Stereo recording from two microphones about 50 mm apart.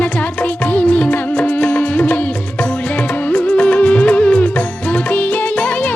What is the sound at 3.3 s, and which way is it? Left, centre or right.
Music, left.